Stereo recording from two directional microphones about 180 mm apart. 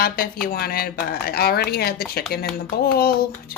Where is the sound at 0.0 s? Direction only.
55° left (ahead or behind).